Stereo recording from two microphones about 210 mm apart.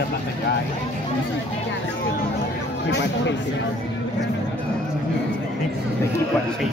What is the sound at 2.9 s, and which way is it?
Speech, 60° left (ahead or behind).